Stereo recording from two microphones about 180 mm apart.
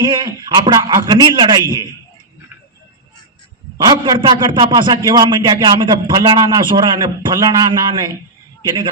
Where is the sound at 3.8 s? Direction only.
25° right (ahead or behind).